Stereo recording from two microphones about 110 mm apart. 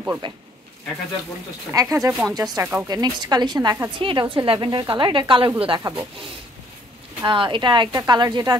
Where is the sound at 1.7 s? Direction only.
25° right (ahead or behind).